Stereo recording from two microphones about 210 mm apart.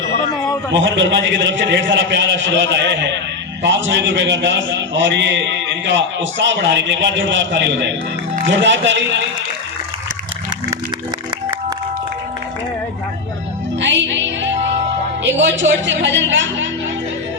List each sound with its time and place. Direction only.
0.7 s a man's voice: 60° right (ahead or behind)
13.8 s music: 60° right (ahead or behind)
15.2 s a man's voice: 60° right (ahead or behind)